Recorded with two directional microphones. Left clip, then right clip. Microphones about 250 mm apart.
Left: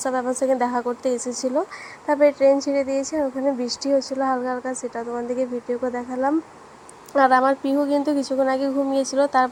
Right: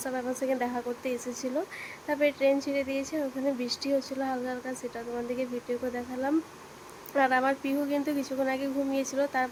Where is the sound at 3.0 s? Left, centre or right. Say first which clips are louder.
Left 8 dB; centre.